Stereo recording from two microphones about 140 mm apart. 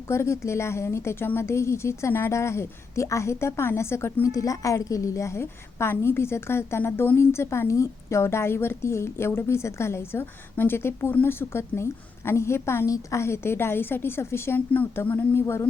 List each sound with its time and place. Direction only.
0.1 s a woman's voice: 20° left (ahead or behind)